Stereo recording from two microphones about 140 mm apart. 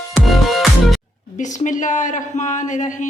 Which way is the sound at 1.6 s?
65° left (ahead or behind).